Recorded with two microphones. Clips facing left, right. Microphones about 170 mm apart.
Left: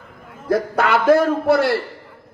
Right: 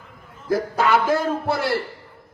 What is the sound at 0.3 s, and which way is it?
A man's voice, 65° left (ahead or behind).